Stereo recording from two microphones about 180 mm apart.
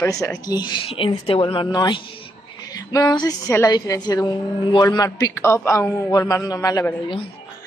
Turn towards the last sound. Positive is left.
turn(degrees=20)  # may be behind; listen again after turning